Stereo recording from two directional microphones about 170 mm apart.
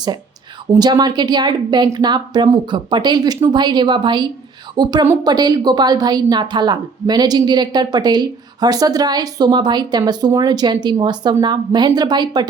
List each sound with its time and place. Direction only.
0.7 s a woman's voice: 25° right (ahead or behind)